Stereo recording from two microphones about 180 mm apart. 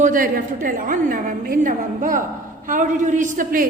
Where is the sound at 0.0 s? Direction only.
50° right (ahead or behind).